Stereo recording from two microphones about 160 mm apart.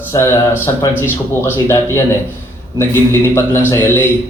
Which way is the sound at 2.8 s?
15° left (ahead or behind).